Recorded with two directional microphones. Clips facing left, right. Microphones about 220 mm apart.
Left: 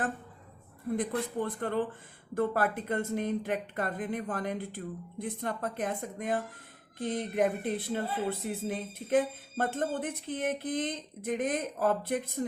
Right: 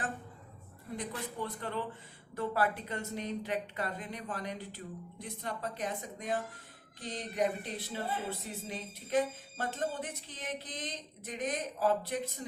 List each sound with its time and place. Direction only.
0.9 s speech: 50° left (ahead or behind)